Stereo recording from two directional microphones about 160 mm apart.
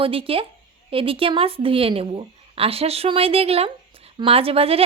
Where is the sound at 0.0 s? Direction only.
35° right (ahead or behind).